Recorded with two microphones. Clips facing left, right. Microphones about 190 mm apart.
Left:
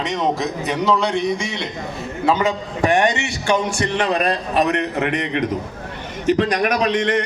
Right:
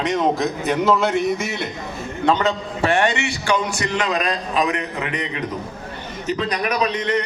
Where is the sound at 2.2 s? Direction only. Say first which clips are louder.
Even; 10° left (ahead or behind); by 4.2 s 25° left (ahead or behind).